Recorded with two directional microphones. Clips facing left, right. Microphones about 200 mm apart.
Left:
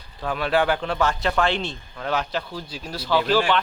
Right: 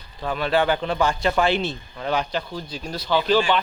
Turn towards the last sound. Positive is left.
turn(degrees=0)  # may be behind; listen again after turning